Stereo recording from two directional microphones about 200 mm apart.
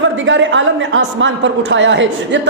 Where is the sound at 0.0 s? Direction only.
70° right (ahead or behind).